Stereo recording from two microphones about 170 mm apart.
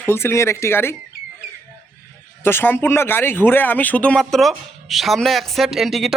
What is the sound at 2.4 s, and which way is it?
Speech, 10° left (ahead or behind).